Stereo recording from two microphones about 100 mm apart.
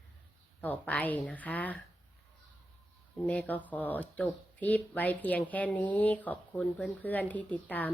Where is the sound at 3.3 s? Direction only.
15° left (ahead or behind).